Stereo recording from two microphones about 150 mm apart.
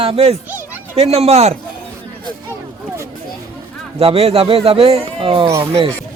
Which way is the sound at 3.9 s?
40° right (ahead or behind).